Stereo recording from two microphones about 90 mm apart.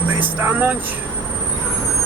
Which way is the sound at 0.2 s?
20° right (ahead or behind).